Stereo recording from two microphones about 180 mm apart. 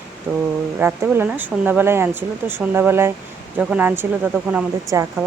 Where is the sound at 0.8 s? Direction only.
10° right (ahead or behind).